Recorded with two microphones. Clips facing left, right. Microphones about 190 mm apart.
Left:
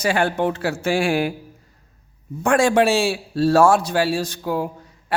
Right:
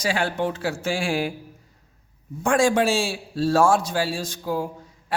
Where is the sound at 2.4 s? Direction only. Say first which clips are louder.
Left 3 dB; 65° left (ahead or behind).